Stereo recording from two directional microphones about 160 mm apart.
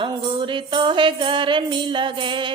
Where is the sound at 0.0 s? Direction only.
30° right (ahead or behind).